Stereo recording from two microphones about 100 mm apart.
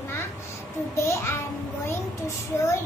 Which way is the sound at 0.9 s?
30° left (ahead or behind).